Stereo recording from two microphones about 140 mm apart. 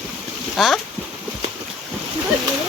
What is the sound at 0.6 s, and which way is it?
Speech, centre (ahead or behind).